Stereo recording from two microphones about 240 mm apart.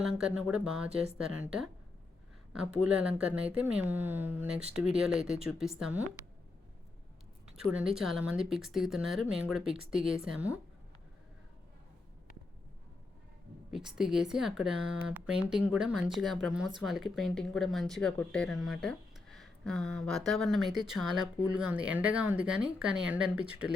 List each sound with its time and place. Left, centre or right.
0.0 s speech: centre
7.5 s speech: centre
13.7 s speech: centre